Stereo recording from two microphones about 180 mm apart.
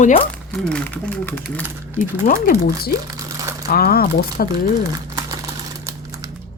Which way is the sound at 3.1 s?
15° right (ahead or behind).